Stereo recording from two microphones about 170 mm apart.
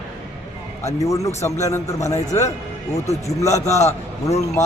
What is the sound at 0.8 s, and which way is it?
Mantra, 20° left (ahead or behind).